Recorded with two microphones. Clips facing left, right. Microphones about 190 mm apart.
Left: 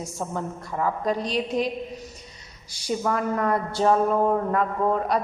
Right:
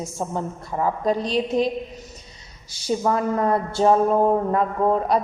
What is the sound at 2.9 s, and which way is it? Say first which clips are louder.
A woman's voice: right 3 dB; 30° right (ahead or behind).